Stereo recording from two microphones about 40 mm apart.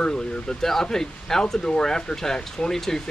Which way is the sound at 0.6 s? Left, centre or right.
Centre.